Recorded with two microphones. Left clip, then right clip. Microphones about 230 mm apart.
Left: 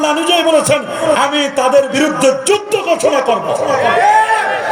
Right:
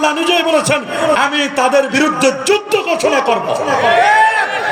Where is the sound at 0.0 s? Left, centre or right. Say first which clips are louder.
Left 1 dB; centre.